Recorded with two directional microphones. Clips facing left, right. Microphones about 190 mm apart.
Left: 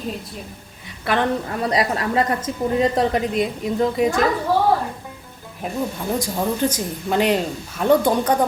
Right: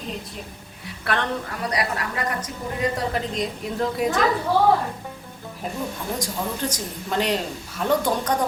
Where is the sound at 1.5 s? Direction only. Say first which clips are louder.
Left 5 dB; 25° left (ahead or behind).